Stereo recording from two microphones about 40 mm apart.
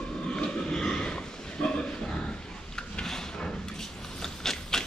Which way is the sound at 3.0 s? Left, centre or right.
Centre.